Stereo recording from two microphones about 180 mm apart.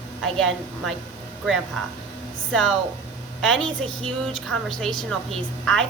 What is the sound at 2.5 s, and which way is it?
A woman's voice, centre (ahead or behind).